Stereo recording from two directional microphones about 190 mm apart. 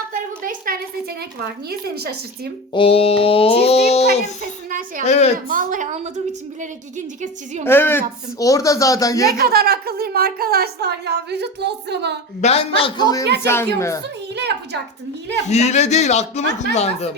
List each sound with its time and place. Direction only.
0.1 s a sound: 45° right (ahead or behind)
2.0 s speech: 55° right (ahead or behind)
2.7 s a child's voice: 30° left (ahead or behind)
4.7 s a woman's voice: 45° right (ahead or behind)
7.6 s speech: 10° left (ahead or behind)
9.4 s a woman's voice: 55° right (ahead or behind)
12.4 s a man's voice: 35° left (ahead or behind); by 14.0 s 15° left (ahead or behind)
14.3 s speech: 60° right (ahead or behind)
15.4 s a man's voice: 35° left (ahead or behind)